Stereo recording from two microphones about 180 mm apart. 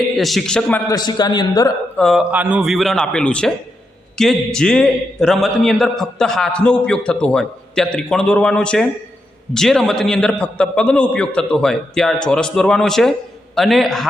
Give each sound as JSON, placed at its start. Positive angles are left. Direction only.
{"t": 0.2, "sound": "a man's voice", "side_deg": 0}
{"t": 0.9, "sound": "a man's voice", "side_deg": 20}
{"t": 2.0, "sound": "a man's voice", "side_deg": 0}
{"t": 2.3, "sound": "a man's voice", "side_deg": -10}